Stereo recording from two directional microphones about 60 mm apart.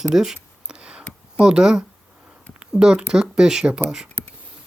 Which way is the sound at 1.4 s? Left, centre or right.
Centre.